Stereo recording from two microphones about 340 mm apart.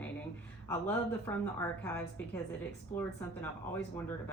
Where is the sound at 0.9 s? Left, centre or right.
Centre.